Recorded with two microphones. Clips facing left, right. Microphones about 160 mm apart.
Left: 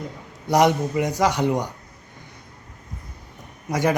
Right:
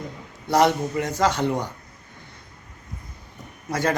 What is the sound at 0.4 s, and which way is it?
Speech, 15° left (ahead or behind).